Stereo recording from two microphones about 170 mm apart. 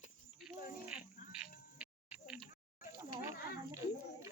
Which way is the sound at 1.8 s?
5° right (ahead or behind).